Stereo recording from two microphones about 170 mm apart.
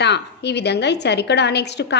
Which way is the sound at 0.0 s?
85° left.